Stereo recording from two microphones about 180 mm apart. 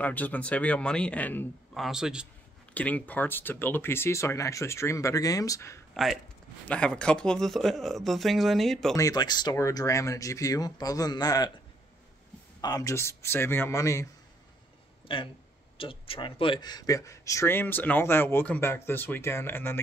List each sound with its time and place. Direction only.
0.0 s speech: 10° left (ahead or behind)
2.7 s speech: 10° left (ahead or behind)
6.7 s speech: 5° left (ahead or behind)
8.9 s speech: 20° left (ahead or behind)
12.6 s speech: 20° left (ahead or behind)
15.1 s speech: 30° left (ahead or behind); by 19.8 s 10° left (ahead or behind)